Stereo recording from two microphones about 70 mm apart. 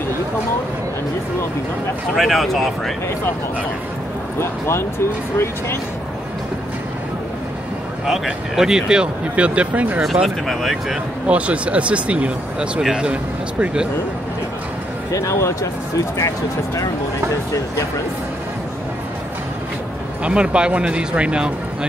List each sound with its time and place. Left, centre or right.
2.1 s speech: centre
4.4 s speech: left
8.1 s speech: centre
10.2 s speech: centre
11.2 s speech: centre
15.0 s speech: left
20.2 s speech: centre